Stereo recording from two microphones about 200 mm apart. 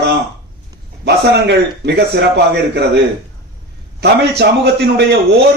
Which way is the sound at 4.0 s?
55° right (ahead or behind).